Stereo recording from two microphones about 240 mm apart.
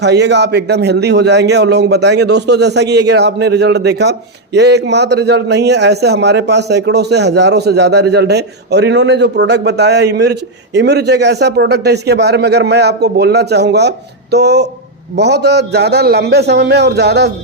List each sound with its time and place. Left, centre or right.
0.0 s a man's voice: right